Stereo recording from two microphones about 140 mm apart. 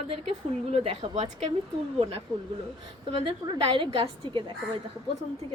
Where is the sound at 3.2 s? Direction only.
35° right (ahead or behind).